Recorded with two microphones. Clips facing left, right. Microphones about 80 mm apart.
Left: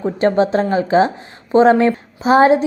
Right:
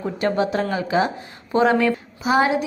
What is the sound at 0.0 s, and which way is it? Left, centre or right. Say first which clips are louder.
A woman's voice: left 6 dB; left.